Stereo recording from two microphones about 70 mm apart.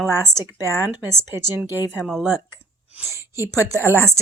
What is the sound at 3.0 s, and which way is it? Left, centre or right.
Speech, right.